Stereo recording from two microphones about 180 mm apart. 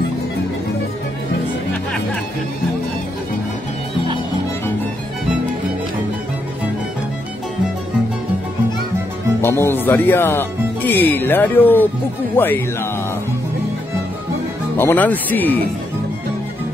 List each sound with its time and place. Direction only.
9.4 s music: 15° left (ahead or behind)
9.8 s speech: 10° left (ahead or behind)
14.8 s speech: 10° left (ahead or behind)